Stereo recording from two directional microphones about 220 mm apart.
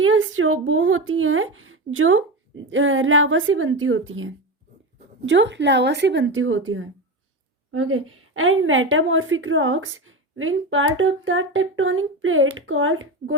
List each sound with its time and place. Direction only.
0.0 s a woman's voice: 65° right (ahead or behind)